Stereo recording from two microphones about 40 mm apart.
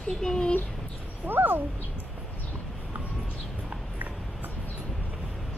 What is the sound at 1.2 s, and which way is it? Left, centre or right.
Speech, right.